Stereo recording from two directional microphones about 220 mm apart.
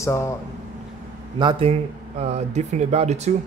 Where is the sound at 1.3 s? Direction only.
20° right (ahead or behind).